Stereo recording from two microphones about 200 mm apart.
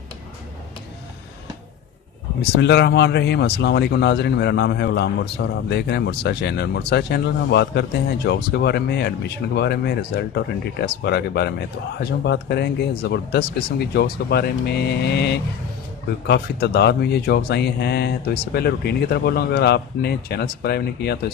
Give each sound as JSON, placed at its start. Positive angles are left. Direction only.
{"t": 2.4, "sound": "speech", "side_deg": 60}